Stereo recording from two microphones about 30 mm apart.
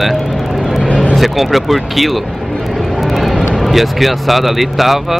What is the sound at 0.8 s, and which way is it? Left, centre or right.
Vehicle, left.